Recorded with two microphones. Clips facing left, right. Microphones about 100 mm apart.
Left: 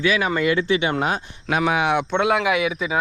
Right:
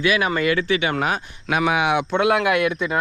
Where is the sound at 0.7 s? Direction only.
25° left (ahead or behind).